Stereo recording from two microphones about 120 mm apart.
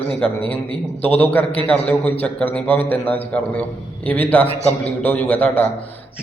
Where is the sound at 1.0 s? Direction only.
15° left (ahead or behind).